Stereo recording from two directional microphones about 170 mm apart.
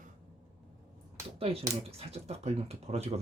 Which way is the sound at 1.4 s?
35° right (ahead or behind).